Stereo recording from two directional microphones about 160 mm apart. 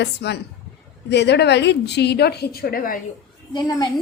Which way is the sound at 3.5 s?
25° left (ahead or behind).